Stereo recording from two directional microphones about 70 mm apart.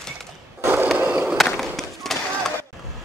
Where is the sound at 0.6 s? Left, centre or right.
Right.